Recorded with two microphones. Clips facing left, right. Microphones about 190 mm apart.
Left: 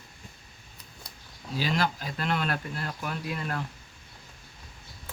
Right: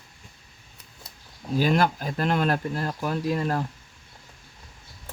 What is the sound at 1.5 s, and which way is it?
Speech, 50° right (ahead or behind).